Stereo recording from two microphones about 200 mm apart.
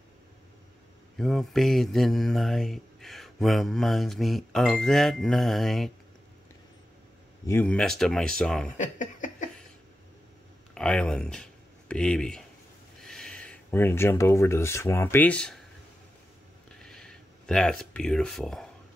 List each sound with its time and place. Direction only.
1.1 s mantra: centre (ahead or behind)
7.4 s mantra: 10° left (ahead or behind)
8.7 s a sound: 40° left (ahead or behind)
10.7 s speech: 5° left (ahead or behind)
11.9 s mantra: 5° left (ahead or behind)
13.0 s speech: centre (ahead or behind)
16.8 s a sound: 5° left (ahead or behind)